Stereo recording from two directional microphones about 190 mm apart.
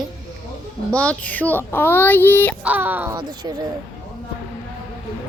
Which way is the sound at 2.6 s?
10° right (ahead or behind).